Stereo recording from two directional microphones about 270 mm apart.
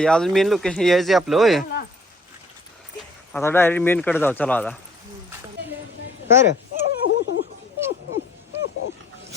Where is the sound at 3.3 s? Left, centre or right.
Centre.